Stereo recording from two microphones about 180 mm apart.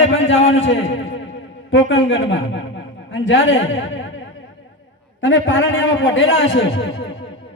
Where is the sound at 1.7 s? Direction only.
90° left.